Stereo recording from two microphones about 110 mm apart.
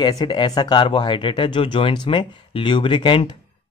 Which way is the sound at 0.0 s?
40° left (ahead or behind).